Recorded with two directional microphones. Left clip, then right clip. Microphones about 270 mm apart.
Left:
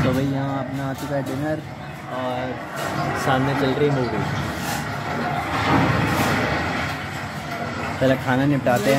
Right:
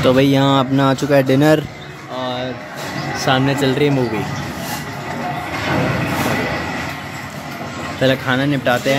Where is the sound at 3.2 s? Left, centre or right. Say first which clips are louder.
Right 6 dB; centre.